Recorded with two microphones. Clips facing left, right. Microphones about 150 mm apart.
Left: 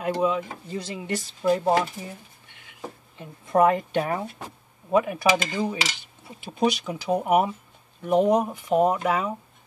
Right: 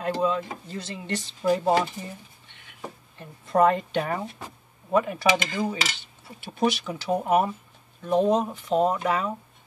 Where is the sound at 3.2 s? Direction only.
10° left (ahead or behind).